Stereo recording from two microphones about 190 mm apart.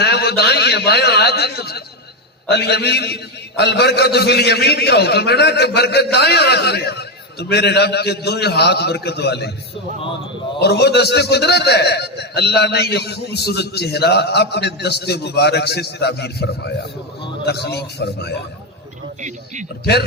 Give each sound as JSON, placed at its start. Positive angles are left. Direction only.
{"t": 0.0, "sound": "a man's voice", "side_deg": 60}
{"t": 10.6, "sound": "a man's voice", "side_deg": 60}
{"t": 19.8, "sound": "a man's voice", "side_deg": 60}